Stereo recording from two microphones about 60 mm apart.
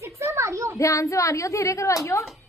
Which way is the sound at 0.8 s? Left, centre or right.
Left.